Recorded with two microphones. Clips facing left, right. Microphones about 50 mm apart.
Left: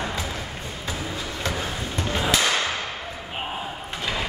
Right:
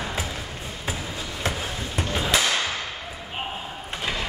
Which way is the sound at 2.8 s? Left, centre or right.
Left.